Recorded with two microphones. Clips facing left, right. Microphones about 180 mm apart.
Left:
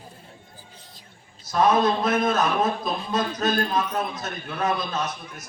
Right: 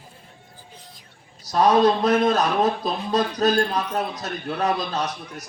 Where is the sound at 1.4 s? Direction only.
35° right (ahead or behind).